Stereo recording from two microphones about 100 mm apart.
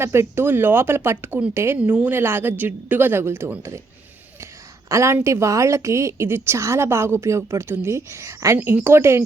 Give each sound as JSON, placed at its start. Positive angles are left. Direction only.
{"t": 0.0, "sound": "speech", "side_deg": -25}
{"t": 4.9, "sound": "speech", "side_deg": -30}